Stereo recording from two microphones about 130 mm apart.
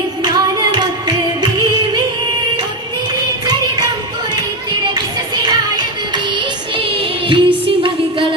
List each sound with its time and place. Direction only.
0.2 s music: 35° right (ahead or behind)
5.4 s music: 30° right (ahead or behind)
6.7 s music: 45° right (ahead or behind)